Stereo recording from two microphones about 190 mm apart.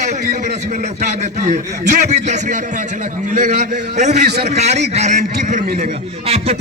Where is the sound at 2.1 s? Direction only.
40° right (ahead or behind).